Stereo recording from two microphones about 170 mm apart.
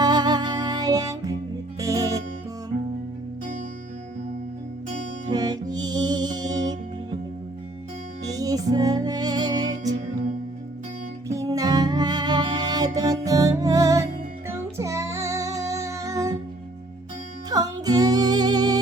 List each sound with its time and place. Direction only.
0.0 s music: 25° right (ahead or behind)
5.3 s music: 25° right (ahead or behind)
8.3 s music: 20° right (ahead or behind)
11.3 s music: 20° right (ahead or behind)
17.5 s music: 20° right (ahead or behind)